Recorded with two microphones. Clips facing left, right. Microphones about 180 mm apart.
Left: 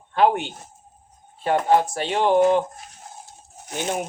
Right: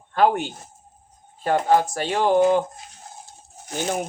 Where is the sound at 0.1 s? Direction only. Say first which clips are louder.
Even; 40° right (ahead or behind).